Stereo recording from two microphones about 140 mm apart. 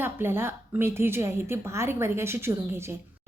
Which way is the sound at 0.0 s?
15° right (ahead or behind).